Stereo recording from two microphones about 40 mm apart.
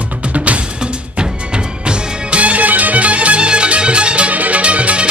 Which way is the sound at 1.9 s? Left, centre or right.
Right.